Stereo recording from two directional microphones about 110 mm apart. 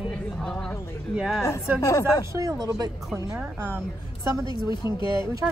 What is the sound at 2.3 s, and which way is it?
A woman's voice, 35° right (ahead or behind).